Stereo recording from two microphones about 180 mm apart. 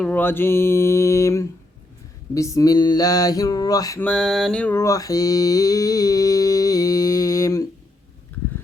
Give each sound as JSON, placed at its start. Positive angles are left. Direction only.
{"t": 0.0, "sound": "mantra", "side_deg": 10}
{"t": 4.0, "sound": "mantra", "side_deg": 5}